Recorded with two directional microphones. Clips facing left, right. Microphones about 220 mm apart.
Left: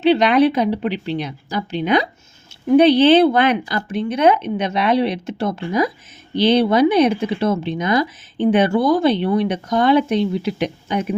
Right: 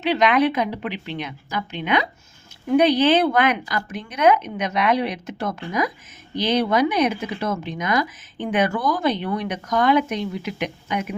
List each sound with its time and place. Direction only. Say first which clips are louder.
0.0 s speech: left 5 dB; 30° left (ahead or behind)